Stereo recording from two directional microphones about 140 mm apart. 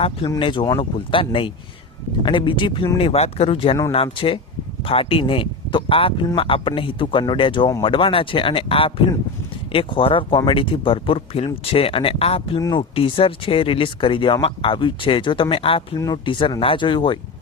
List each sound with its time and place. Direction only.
0.3 s speech: 35° left (ahead or behind)
12.5 s speech: 35° left (ahead or behind)